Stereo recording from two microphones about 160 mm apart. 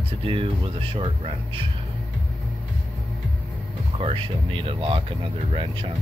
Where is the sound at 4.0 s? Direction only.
35° right (ahead or behind).